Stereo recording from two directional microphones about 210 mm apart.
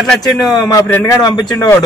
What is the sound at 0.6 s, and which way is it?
A man's voice, 15° left (ahead or behind).